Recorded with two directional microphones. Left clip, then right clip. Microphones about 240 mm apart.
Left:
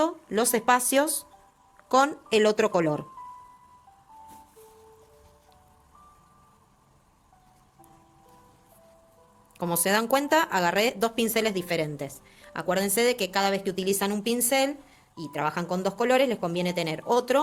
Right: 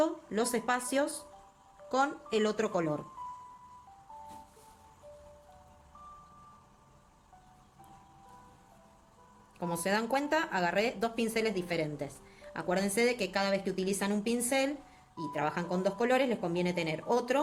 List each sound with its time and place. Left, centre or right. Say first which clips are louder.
0.0 s a woman's voice: left 5 dB; left
9.6 s a woman's voice: left 7 dB; left